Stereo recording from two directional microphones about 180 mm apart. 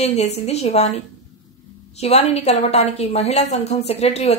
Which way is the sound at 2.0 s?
35° left (ahead or behind).